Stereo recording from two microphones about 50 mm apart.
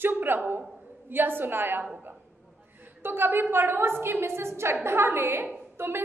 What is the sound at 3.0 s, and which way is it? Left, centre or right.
A woman's voice, right.